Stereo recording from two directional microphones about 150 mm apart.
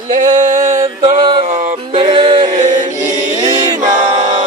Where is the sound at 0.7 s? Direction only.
25° right (ahead or behind).